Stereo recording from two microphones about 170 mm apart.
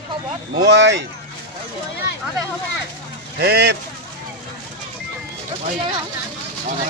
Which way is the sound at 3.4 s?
70° right (ahead or behind).